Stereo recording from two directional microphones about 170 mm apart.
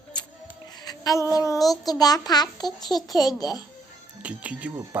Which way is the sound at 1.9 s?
20° left (ahead or behind).